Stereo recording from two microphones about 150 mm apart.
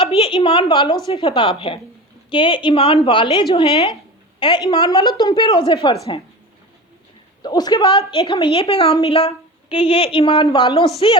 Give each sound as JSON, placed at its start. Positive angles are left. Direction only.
{"t": 0.0, "sound": "a woman's voice", "side_deg": 35}
{"t": 7.4, "sound": "a woman's voice", "side_deg": 25}